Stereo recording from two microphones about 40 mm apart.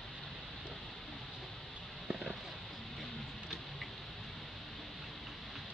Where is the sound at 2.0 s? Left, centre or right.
Centre.